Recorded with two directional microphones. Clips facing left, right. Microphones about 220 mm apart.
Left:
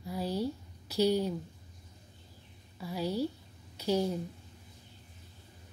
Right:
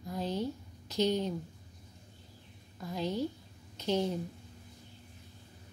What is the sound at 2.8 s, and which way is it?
A woman's voice, 10° left (ahead or behind).